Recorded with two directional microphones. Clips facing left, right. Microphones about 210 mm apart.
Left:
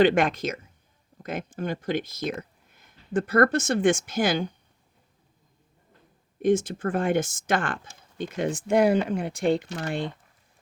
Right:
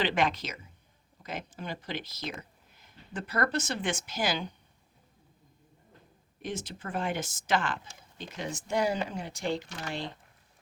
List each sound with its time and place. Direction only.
0.0 s speech: 50° left (ahead or behind)
6.4 s speech: 50° left (ahead or behind)